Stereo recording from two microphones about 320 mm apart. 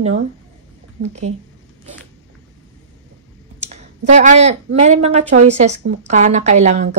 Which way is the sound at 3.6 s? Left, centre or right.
Right.